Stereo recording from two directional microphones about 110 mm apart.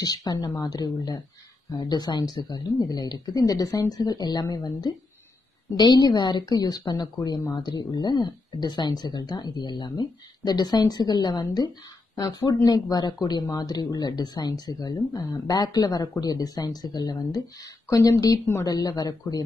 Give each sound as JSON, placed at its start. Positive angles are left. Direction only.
{"t": 0.0, "sound": "speech", "side_deg": 35}